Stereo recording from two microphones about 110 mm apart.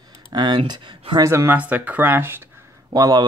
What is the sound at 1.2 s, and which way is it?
Speech, 30° right (ahead or behind).